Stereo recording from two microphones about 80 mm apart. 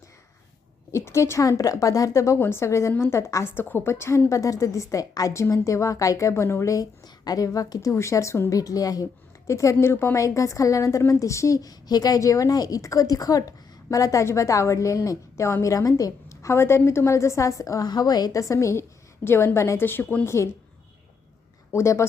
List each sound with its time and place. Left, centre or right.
0.9 s a woman's voice: left
7.0 s a woman's voice: left
8.5 s a woman's voice: left
9.5 s a woman's voice: left
21.7 s a woman's voice: left